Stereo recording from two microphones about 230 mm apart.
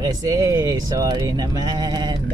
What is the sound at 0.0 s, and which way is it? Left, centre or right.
Speech, centre.